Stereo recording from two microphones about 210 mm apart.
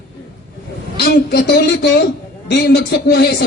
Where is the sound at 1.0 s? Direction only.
50° left (ahead or behind).